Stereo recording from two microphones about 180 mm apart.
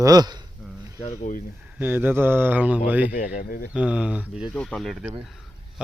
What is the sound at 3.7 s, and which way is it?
Speech, 5° right (ahead or behind).